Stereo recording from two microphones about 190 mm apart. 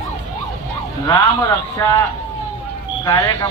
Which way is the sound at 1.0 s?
20° left (ahead or behind).